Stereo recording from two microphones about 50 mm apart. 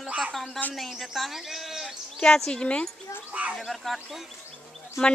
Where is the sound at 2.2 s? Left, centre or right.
Centre.